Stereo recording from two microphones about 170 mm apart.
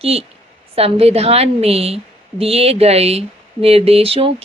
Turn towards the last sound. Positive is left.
turn(degrees=-35)  # may be behind; listen again after turning